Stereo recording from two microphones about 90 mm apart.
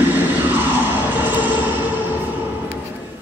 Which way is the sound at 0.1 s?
20° right (ahead or behind).